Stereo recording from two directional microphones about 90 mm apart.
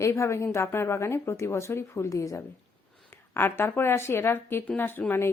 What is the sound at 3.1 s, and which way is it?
A woman's voice, 25° left (ahead or behind).